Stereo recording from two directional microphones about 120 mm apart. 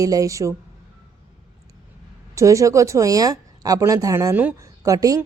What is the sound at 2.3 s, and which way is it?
A woman's voice, 25° right (ahead or behind).